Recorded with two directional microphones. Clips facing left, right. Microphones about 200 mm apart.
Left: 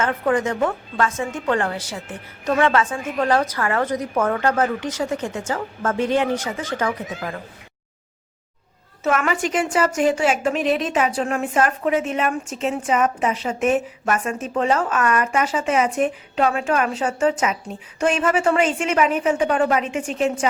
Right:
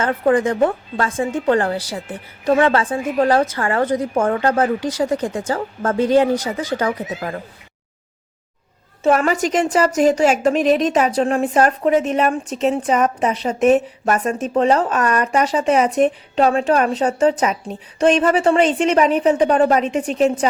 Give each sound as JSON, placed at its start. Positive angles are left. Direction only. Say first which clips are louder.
{"t": 0.0, "sound": "a woman's voice", "louder": "right 4 dB", "side_deg": -35}
{"t": 9.0, "sound": "a woman's voice", "louder": "right 5 dB", "side_deg": -35}